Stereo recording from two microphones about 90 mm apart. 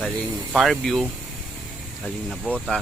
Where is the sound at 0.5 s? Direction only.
Centre (ahead or behind).